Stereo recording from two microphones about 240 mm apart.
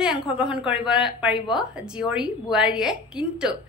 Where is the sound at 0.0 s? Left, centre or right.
Centre.